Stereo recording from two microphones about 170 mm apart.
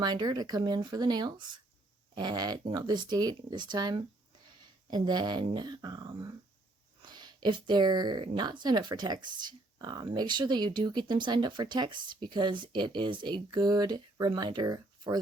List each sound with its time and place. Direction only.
0.0 s speech: 25° right (ahead or behind)